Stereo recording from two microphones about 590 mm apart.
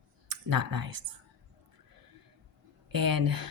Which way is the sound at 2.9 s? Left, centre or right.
Right.